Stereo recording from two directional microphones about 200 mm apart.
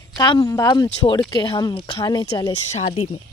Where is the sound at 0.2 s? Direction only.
20° left (ahead or behind).